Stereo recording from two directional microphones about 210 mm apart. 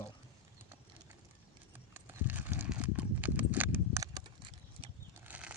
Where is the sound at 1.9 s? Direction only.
10° right (ahead or behind).